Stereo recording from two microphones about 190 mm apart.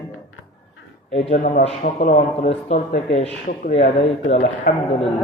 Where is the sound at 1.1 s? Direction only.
35° left (ahead or behind).